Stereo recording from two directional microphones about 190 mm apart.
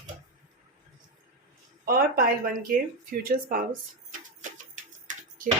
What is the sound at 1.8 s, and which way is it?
Speech, 50° right (ahead or behind).